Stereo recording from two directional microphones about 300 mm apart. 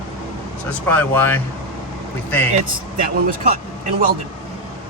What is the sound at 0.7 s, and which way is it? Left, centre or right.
Speech, centre.